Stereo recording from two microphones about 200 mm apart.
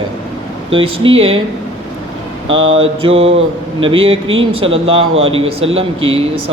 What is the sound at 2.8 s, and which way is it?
Speech, 30° right (ahead or behind).